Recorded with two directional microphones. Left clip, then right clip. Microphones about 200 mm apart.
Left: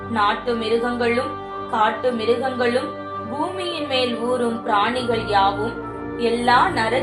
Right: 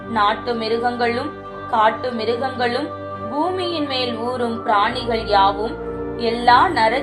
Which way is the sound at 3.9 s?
40° right (ahead or behind).